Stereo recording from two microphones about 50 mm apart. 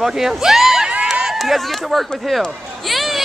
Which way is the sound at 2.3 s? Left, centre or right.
Centre.